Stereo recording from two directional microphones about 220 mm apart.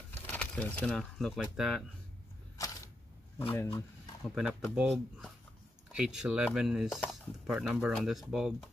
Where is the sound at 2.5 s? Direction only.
15° left (ahead or behind).